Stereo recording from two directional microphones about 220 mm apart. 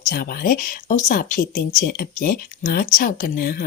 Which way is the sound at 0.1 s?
40° left (ahead or behind).